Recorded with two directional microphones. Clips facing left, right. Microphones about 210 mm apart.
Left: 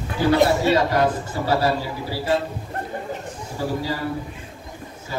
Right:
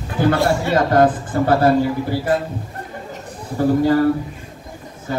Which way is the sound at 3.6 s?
55° right (ahead or behind).